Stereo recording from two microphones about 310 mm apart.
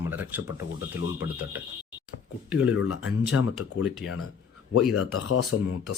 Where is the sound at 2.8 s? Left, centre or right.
Left.